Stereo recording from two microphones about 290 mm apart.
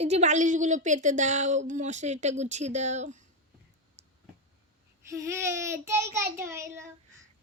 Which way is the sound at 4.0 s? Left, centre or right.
Right.